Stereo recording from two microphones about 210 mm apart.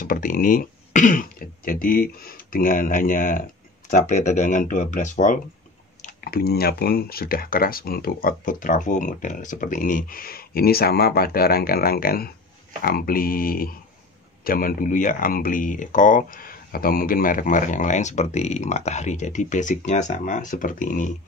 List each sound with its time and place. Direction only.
0.0 s speech: 40° left (ahead or behind)